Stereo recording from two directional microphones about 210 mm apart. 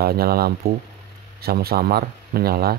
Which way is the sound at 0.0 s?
45° right (ahead or behind).